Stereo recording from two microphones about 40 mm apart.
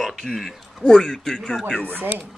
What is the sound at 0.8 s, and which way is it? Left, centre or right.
Speech, left.